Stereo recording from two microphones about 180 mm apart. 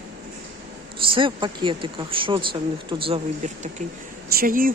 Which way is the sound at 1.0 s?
30° right (ahead or behind).